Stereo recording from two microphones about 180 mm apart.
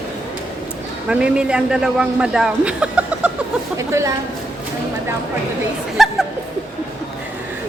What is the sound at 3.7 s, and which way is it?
Speech, 15° right (ahead or behind).